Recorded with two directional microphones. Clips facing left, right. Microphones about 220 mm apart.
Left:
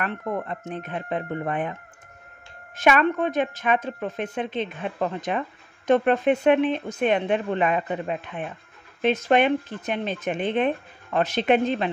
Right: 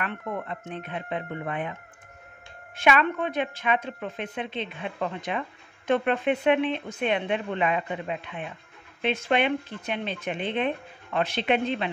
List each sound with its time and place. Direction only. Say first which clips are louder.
0.0 s a woman's voice: left 4 dB; 40° left (ahead or behind)